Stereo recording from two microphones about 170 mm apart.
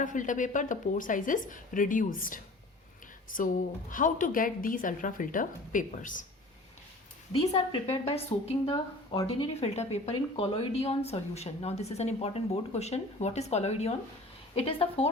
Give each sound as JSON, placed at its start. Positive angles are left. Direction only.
{"t": 0.0, "sound": "a woman's voice", "side_deg": 50}
{"t": 7.5, "sound": "a woman's voice", "side_deg": 35}